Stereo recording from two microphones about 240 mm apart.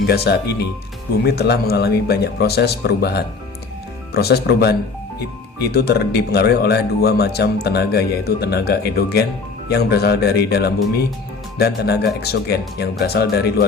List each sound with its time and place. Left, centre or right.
0.1 s speech: left